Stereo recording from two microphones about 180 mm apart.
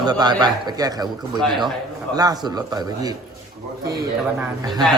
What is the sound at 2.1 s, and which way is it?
A man's voice, 20° right (ahead or behind).